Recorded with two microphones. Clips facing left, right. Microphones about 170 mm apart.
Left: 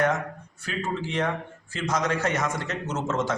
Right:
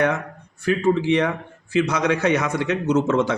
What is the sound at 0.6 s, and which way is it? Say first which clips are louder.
A man's voice: right 11 dB; 60° right (ahead or behind).